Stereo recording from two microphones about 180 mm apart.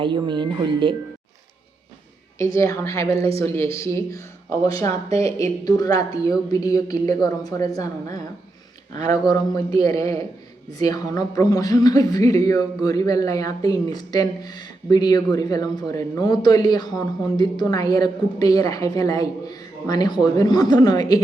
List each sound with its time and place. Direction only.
0.0 s speech: 25° right (ahead or behind)
2.4 s speech: 15° left (ahead or behind)
5.0 s speech: 35° right (ahead or behind)
5.4 s speech: 20° left (ahead or behind)
9.3 s speech: 20° left (ahead or behind)